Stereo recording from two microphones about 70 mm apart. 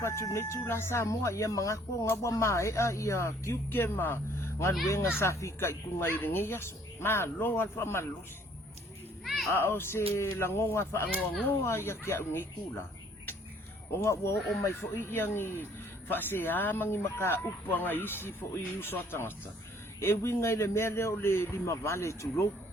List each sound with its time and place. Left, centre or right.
0.0 s speech: left
3.7 s speech: left
9.2 s a sound: centre
9.5 s speech: left
14.0 s speech: left